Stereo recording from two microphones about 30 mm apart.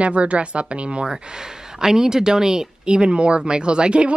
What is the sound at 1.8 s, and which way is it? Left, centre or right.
Speech, right.